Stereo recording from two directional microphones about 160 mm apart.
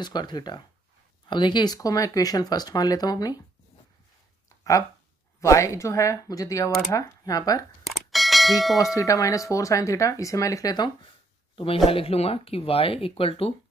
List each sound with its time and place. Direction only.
0.0 s speech: 25° left (ahead or behind)
5.4 s speech: 20° left (ahead or behind)
7.8 s bell: centre (ahead or behind)
8.9 s speech: 20° left (ahead or behind)
11.5 s speech: 35° left (ahead or behind)